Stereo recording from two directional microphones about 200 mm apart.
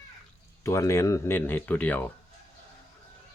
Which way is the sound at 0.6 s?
15° left (ahead or behind).